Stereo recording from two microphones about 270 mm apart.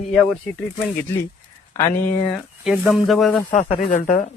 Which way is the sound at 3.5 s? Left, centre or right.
Left.